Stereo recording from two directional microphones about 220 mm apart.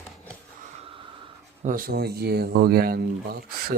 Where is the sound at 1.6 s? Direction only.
40° right (ahead or behind).